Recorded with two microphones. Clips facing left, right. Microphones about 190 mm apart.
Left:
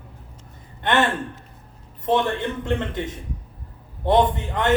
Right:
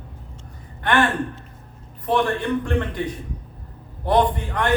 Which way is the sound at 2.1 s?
20° left (ahead or behind).